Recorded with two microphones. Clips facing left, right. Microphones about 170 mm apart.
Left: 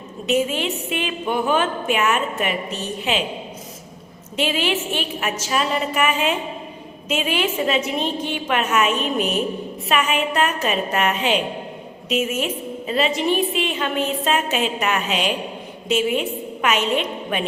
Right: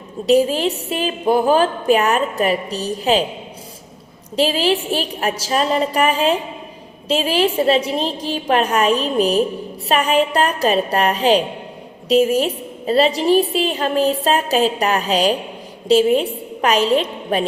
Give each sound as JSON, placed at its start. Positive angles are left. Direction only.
{"t": 0.3, "sound": "a woman's voice", "side_deg": -35}
{"t": 4.4, "sound": "a woman's voice", "side_deg": -35}